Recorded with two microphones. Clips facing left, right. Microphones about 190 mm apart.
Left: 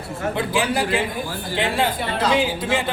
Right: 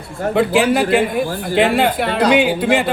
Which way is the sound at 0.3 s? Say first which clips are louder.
Right 9 dB; 70° right (ahead or behind).